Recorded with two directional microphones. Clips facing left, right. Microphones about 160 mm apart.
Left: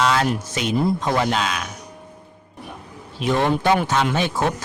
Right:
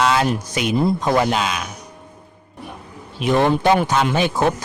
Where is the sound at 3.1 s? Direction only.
15° right (ahead or behind).